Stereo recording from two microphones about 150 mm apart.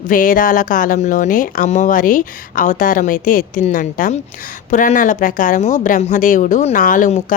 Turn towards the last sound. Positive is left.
turn(degrees=55)  # may be behind; listen again after turning